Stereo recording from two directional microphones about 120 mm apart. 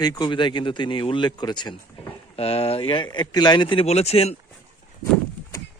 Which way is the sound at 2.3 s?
60° left (ahead or behind).